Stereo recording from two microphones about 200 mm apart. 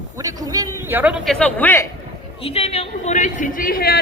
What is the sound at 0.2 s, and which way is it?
Speech, 15° right (ahead or behind).